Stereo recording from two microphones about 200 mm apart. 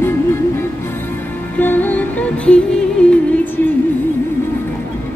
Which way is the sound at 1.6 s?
10° left (ahead or behind).